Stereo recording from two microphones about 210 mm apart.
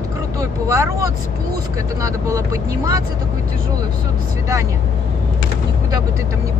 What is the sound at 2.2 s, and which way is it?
Speech, 15° right (ahead or behind).